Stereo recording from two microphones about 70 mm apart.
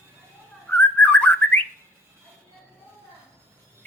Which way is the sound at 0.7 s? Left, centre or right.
Left.